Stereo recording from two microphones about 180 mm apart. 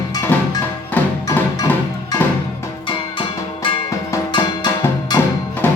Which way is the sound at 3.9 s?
20° left (ahead or behind).